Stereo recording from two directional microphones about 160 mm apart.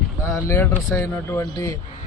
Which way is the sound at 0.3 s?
15° left (ahead or behind).